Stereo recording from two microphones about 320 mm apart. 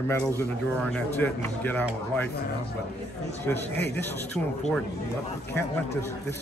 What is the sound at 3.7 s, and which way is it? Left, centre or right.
Speech, left.